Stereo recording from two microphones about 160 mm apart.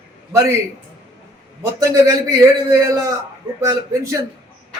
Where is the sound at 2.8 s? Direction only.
20° right (ahead or behind).